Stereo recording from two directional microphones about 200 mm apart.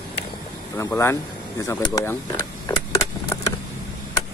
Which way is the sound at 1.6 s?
15° left (ahead or behind).